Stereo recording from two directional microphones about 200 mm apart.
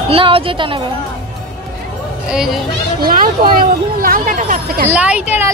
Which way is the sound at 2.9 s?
45° right (ahead or behind).